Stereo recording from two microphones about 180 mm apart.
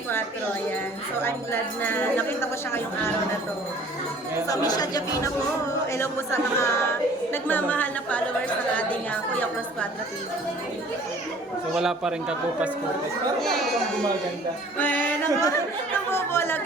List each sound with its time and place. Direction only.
1.2 s speech: 10° left (ahead or behind)
4.4 s speech: 20° left (ahead or behind)
11.8 s speech: 5° right (ahead or behind)
14.8 s music: 10° left (ahead or behind)
16.1 s speech: 15° left (ahead or behind)